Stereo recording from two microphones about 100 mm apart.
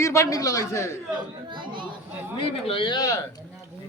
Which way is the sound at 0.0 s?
30° left (ahead or behind).